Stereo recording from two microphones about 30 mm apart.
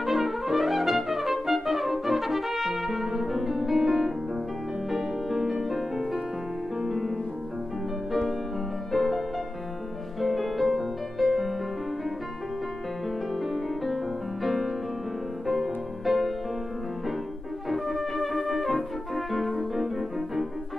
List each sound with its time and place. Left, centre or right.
0.0 s trumpet: centre
4.9 s music: centre
8.1 s music: centre
10.2 s music: centre
14.4 s music: centre
17.6 s music: centre
19.5 s music: centre